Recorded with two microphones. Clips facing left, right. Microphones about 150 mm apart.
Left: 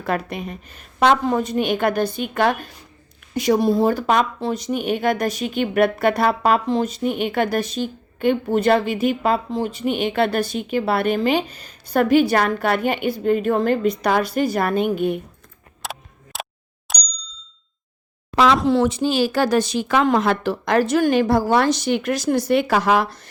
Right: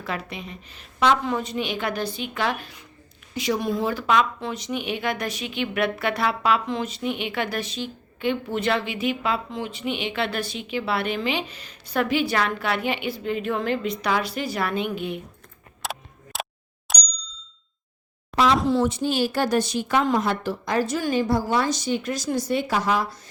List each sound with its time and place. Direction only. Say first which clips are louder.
0.0 s speech: left 7 dB; 50° left (ahead or behind)
15.8 s single-lens reflex camera: even; centre (ahead or behind)
16.9 s ding: even; centre (ahead or behind)
18.7 s a woman's voice: left 4 dB; 80° left